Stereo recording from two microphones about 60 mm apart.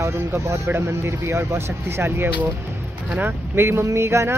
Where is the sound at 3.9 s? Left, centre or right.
Right.